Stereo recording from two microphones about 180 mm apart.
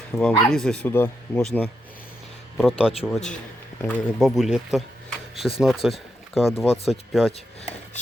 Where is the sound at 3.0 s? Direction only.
Centre (ahead or behind).